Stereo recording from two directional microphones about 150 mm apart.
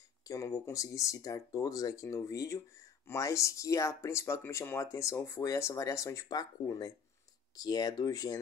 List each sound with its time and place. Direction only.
0.2 s speech: 20° left (ahead or behind)